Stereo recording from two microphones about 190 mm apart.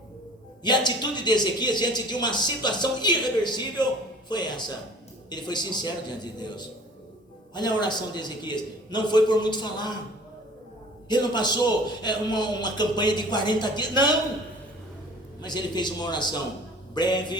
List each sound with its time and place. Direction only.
0.6 s a man's voice: 25° left (ahead or behind)
11.1 s a man's voice: 20° left (ahead or behind)
15.4 s a man's voice: 20° left (ahead or behind)